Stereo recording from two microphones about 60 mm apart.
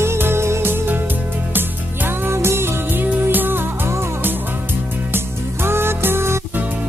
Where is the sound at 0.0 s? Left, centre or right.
Right.